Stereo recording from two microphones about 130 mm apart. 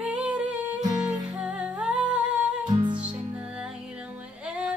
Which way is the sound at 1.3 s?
10° right (ahead or behind).